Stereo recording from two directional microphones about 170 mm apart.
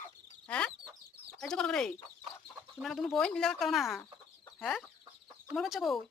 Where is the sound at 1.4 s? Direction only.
5° left (ahead or behind).